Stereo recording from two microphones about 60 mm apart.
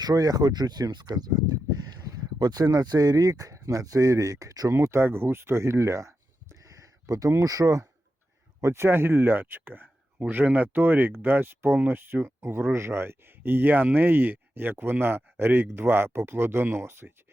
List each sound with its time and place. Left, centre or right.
0.0 s speech: right
0.8 s speech: right
2.6 s speech: right
6.6 s a sound: right
8.6 s speech: right